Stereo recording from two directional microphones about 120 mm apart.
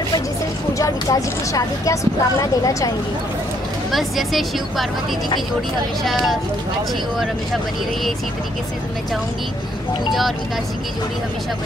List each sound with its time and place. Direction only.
0.7 s speech: 30° left (ahead or behind)
3.9 s a woman's voice: centre (ahead or behind)
6.0 s a woman's voice: centre (ahead or behind)